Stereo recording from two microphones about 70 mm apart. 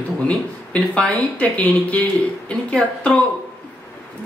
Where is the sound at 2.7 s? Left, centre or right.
Centre.